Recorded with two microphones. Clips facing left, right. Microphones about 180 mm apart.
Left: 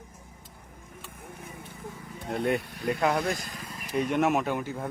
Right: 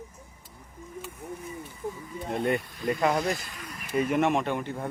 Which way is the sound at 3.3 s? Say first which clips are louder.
Even; 40° left (ahead or behind).